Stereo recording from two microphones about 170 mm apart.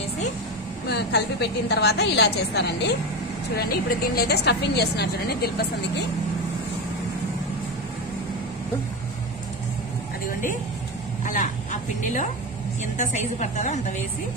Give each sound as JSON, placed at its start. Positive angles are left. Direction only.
{"t": 0.8, "sound": "a woman's voice", "side_deg": 75}
{"t": 3.5, "sound": "a woman's voice", "side_deg": 60}
{"t": 12.9, "sound": "a woman's voice", "side_deg": 45}